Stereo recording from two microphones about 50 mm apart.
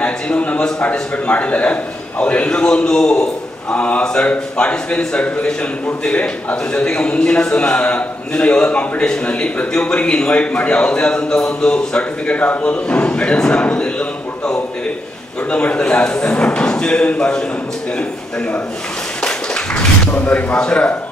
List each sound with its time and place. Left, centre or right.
0.0 s a man's voice: left
3.7 s a man's voice: left
19.2 s a sound: left
20.1 s a man's voice: left